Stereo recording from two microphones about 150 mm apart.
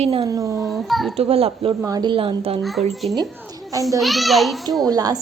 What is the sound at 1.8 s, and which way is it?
Speech, 25° right (ahead or behind).